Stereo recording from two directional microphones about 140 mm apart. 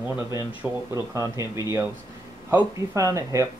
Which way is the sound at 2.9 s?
25° right (ahead or behind).